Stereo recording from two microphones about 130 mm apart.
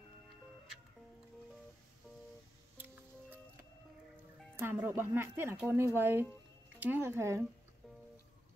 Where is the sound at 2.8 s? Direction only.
15° right (ahead or behind).